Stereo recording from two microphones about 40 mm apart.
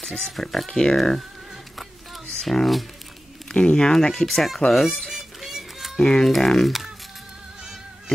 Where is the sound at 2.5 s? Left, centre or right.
Centre.